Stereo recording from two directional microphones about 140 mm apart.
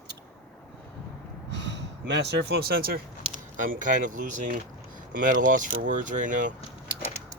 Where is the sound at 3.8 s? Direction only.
70° right (ahead or behind).